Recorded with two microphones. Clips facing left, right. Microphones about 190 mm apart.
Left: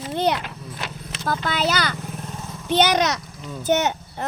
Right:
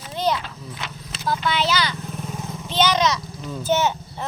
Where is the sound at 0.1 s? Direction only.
60° left (ahead or behind).